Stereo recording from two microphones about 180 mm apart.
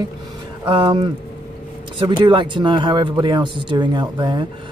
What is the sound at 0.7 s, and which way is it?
Speech, 25° right (ahead or behind).